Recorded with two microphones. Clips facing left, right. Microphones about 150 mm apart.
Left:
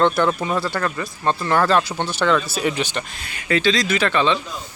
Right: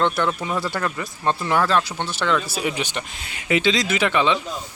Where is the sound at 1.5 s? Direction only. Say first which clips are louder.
Left 4 dB; centre (ahead or behind).